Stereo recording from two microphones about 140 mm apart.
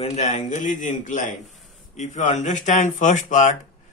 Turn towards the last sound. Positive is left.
turn(degrees=65)  # may be behind; listen again after turning